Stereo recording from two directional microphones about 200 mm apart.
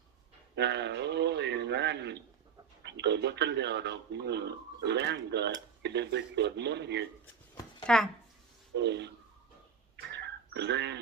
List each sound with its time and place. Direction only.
0.5 s a man's voice: 60° right (ahead or behind)
7.9 s speech: 5° left (ahead or behind)
8.7 s speech: 60° right (ahead or behind)
10.0 s a sound: 60° right (ahead or behind)